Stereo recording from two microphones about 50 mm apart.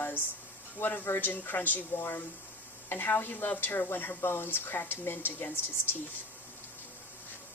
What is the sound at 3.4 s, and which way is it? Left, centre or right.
Speech, left.